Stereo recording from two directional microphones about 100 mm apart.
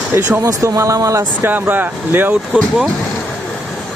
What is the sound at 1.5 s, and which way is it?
Speech, 20° right (ahead or behind).